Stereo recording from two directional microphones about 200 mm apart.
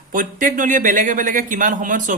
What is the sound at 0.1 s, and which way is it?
A man's voice, 40° right (ahead or behind).